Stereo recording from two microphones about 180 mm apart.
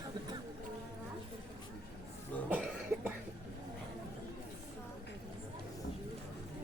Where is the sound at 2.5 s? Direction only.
5° right (ahead or behind).